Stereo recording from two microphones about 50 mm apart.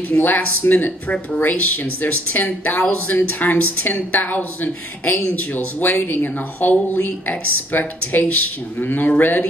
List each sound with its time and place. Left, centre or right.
0.1 s speech: centre
0.6 s a woman's voice: left